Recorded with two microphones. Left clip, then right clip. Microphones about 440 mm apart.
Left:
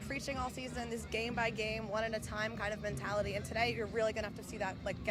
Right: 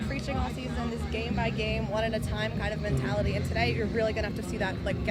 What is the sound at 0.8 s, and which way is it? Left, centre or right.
Speech, left.